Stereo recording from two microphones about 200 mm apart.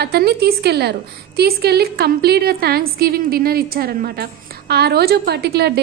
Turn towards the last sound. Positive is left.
turn(degrees=-55)  # may be behind; listen again after turning